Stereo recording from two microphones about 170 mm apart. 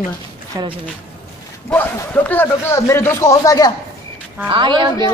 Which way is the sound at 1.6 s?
10° left (ahead or behind).